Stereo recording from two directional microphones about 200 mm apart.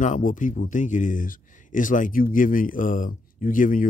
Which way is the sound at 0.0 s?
40° left (ahead or behind).